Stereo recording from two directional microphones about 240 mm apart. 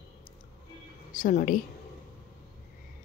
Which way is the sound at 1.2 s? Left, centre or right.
Left.